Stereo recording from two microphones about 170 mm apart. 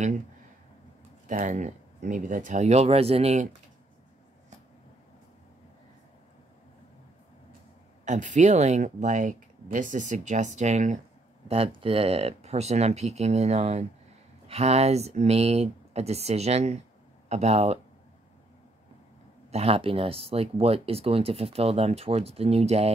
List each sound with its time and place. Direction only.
1.2 s speech: 50° right (ahead or behind)
8.0 s speech: 45° right (ahead or behind)
11.4 s speech: 35° right (ahead or behind)
19.5 s speech: 35° right (ahead or behind)